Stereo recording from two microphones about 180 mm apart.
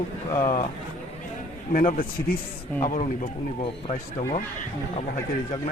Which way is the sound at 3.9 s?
35° left (ahead or behind).